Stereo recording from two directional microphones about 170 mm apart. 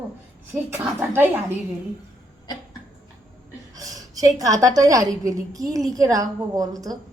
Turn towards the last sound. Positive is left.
turn(degrees=-20)  # may be behind; listen again after turning